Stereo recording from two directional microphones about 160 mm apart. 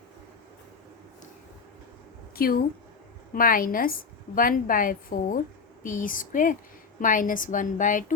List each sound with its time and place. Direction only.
2.3 s a woman's voice: 65° left (ahead or behind)